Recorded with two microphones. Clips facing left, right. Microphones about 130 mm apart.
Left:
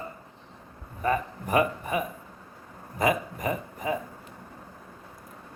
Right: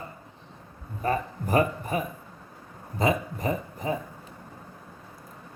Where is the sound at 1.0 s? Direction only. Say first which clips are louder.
Even; 35° right (ahead or behind).